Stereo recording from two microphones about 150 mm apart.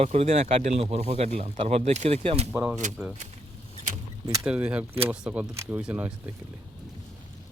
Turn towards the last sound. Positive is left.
turn(degrees=-10)  # may be behind; listen again after turning